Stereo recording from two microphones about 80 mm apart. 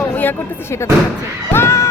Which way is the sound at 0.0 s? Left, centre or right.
Left.